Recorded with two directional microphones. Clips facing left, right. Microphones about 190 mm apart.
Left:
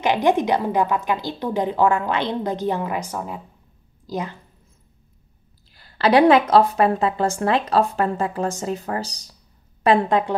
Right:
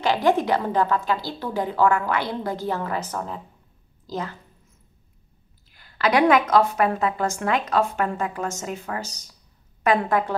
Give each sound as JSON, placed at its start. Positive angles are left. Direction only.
{"t": 0.0, "sound": "a woman's voice", "side_deg": 20}
{"t": 5.7, "sound": "a woman's voice", "side_deg": 30}
{"t": 9.8, "sound": "a woman's voice", "side_deg": 25}